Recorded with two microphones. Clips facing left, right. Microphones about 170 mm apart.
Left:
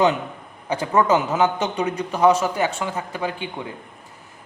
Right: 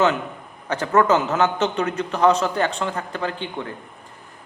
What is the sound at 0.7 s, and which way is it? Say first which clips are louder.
Speech: right 1 dB; 10° left (ahead or behind).